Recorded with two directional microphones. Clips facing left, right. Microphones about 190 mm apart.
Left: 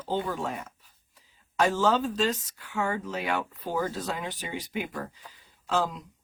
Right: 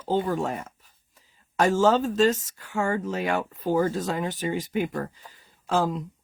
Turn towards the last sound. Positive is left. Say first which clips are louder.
# right 4 dB
turn(degrees=-45)  # may be behind; listen again after turning